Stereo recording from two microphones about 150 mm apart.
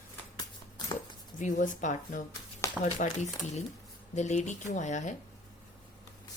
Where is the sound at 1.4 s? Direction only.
55° left (ahead or behind).